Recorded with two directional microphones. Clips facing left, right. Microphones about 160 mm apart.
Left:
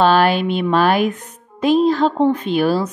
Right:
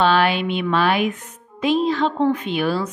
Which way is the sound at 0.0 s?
40° left (ahead or behind).